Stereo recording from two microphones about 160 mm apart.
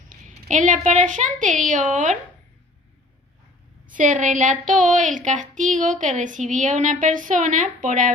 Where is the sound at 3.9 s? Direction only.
55° right (ahead or behind).